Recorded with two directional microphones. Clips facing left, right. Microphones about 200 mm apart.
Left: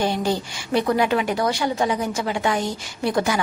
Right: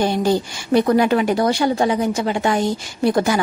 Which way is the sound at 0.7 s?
45° right (ahead or behind).